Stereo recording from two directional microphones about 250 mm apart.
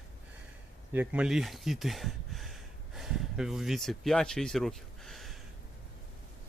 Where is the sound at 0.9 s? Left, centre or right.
Centre.